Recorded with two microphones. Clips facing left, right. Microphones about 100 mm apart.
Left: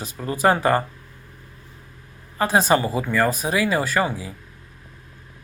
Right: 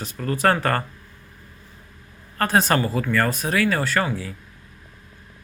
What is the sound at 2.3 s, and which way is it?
Speech, 5° left (ahead or behind).